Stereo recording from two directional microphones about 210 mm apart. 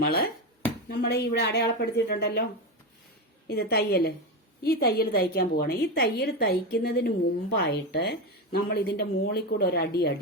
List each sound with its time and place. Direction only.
0.0 s a woman's voice: 50° left (ahead or behind)
3.4 s a woman's voice: 50° left (ahead or behind)